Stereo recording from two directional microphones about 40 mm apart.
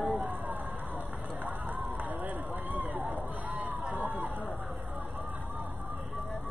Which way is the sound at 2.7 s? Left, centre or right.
Right.